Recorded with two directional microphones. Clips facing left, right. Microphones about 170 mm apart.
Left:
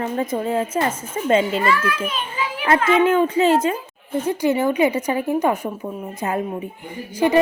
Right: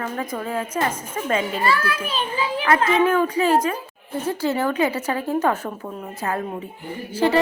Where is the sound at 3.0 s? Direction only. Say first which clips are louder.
Left 3 dB; 25° left (ahead or behind).